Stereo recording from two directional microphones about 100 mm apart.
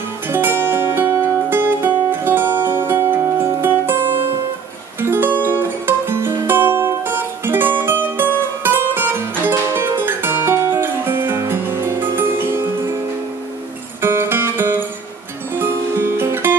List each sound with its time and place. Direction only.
0.3 s music: 25° right (ahead or behind)
14.0 s music: 25° right (ahead or behind)